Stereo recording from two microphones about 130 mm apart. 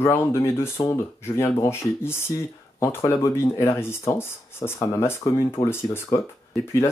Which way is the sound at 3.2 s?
20° left (ahead or behind).